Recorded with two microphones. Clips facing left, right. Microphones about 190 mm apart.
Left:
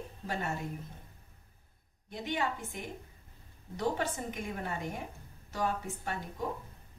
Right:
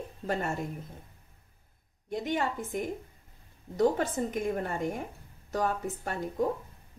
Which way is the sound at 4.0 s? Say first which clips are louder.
Right 6 dB; 45° right (ahead or behind).